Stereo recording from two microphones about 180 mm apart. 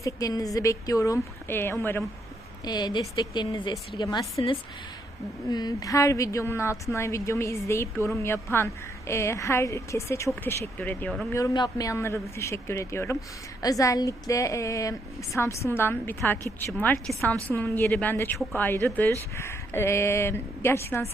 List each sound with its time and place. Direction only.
0.0 s a woman's voice: 20° left (ahead or behind); by 11.3 s 5° left (ahead or behind)
11.3 s a woman's voice: 15° left (ahead or behind)